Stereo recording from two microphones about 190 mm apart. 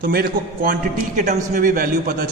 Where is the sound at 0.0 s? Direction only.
55° right (ahead or behind).